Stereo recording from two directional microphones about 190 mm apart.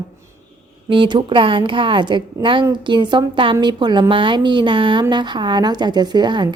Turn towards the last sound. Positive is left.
turn(degrees=-25)  # may be behind; listen again after turning